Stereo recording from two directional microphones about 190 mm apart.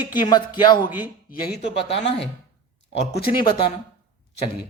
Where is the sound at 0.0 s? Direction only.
25° left (ahead or behind).